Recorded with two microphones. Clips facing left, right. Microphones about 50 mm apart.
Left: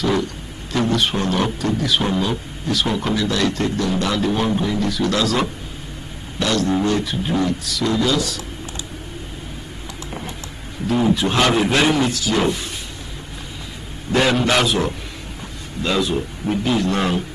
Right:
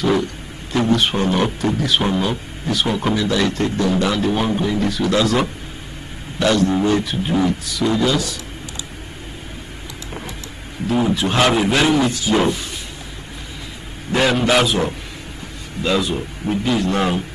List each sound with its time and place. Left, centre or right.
0.0 s a sound: centre
0.7 s speech: centre
3.7 s speech: centre
6.7 s speech: centre
10.9 s a man's voice: centre
12.1 s speech: centre
14.1 s a man's voice: centre